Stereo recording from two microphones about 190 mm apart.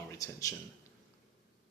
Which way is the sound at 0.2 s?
20° left (ahead or behind).